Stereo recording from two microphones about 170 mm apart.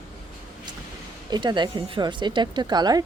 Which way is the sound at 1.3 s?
25° right (ahead or behind).